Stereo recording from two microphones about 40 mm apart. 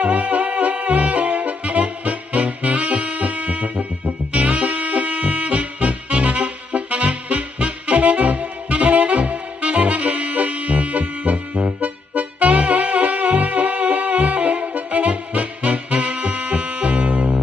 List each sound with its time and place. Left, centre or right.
0.0 s saxophone: right